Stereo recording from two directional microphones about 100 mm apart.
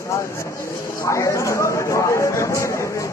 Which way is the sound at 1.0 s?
30° left (ahead or behind).